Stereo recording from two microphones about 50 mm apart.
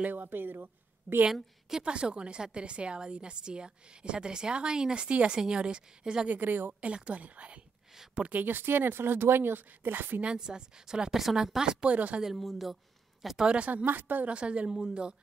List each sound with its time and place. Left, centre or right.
0.0 s speech: right
1.3 s a woman's voice: centre
1.9 s a woman's voice: right
6.2 s speech: right
6.7 s a woman's voice: centre; by 10.2 s right
10.2 s a woman's voice: centre
11.8 s a woman's voice: right
12.4 s speech: centre
13.4 s a woman's voice: centre
13.8 s speech: right
14.3 s a woman's voice: right